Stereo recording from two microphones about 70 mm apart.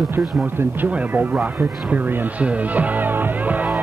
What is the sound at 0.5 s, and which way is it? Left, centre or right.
Speech, right.